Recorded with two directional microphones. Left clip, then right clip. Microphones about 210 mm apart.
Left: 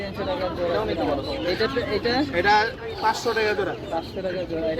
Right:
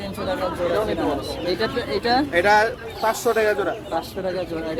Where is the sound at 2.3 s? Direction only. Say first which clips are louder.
Right 2 dB; 50° right (ahead or behind).